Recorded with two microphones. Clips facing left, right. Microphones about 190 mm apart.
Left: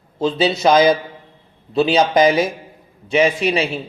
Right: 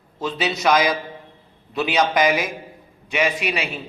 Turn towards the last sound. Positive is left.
turn(degrees=30)  # may be behind; listen again after turning